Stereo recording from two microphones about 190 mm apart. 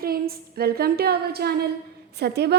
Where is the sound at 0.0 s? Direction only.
55° right (ahead or behind).